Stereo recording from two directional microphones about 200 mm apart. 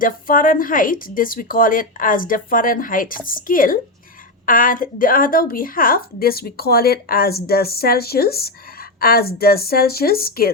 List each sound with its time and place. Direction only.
0.0 s a woman's voice: 45° left (ahead or behind)